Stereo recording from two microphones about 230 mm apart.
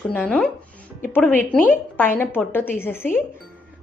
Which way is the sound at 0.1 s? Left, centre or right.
Centre.